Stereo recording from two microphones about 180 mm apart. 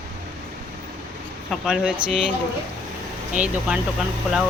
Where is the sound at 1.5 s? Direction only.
Centre (ahead or behind).